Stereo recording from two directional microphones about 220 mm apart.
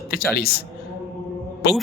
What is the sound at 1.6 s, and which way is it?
Speech, 50° left (ahead or behind).